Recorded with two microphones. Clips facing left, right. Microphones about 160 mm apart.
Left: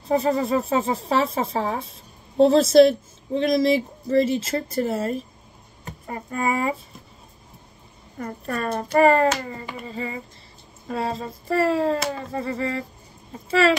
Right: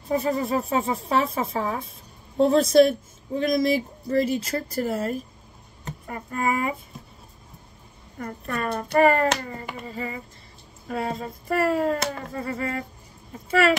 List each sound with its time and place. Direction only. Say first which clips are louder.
0.1 s a woman's voice: left 3 dB; 25° left (ahead or behind)
6.4 s speech: left 1 dB; 30° left (ahead or behind)
8.2 s a woman's voice: left 2 dB; 30° left (ahead or behind)